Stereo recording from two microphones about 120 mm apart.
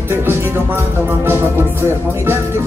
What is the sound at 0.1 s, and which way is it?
Music, 20° right (ahead or behind).